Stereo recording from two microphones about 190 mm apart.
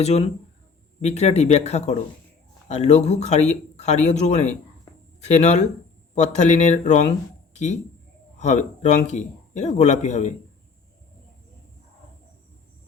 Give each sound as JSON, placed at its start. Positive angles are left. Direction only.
{"t": 0.0, "sound": "a man's voice", "side_deg": 35}
{"t": 8.4, "sound": "a man's voice", "side_deg": 40}